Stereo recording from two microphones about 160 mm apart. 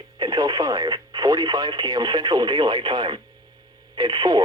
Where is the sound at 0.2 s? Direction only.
25° right (ahead or behind).